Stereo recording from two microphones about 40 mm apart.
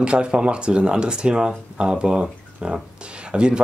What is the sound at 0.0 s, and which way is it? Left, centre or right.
Speech, right.